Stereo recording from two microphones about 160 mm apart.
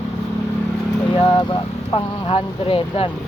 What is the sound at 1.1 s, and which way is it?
Speech, 30° left (ahead or behind).